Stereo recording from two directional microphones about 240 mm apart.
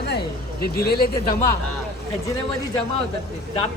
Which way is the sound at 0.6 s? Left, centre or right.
Left.